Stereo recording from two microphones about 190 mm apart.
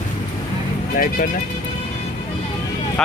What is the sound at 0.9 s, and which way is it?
Speech, 50° left (ahead or behind).